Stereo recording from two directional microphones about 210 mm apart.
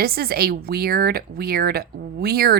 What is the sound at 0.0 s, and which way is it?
Speech, 45° right (ahead or behind).